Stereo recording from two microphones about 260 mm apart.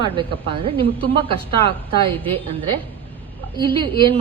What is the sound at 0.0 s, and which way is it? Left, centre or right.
A woman's voice, centre.